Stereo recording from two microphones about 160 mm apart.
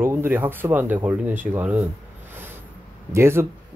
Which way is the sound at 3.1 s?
15° right (ahead or behind).